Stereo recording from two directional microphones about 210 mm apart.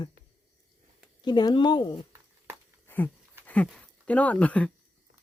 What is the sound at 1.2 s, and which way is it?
Speech, 20° left (ahead or behind).